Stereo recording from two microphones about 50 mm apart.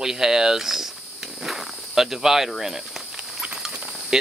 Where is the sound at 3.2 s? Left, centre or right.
Centre.